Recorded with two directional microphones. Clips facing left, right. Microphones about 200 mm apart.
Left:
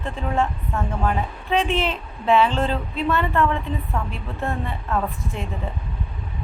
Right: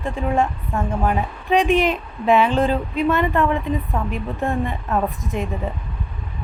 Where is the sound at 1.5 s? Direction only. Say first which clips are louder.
Right 5 dB; 15° right (ahead or behind).